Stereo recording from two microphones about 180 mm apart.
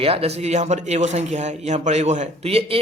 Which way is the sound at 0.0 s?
35° right (ahead or behind).